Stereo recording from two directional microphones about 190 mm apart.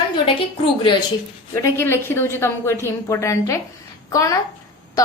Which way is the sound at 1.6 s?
10° left (ahead or behind).